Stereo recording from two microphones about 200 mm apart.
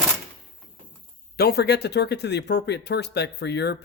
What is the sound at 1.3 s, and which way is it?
Speech, 55° left (ahead or behind).